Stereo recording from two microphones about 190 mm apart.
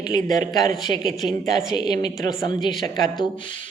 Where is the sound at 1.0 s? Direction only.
Centre (ahead or behind).